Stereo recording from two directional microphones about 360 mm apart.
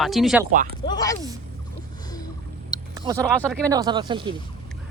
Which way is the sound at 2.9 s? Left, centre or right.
Centre.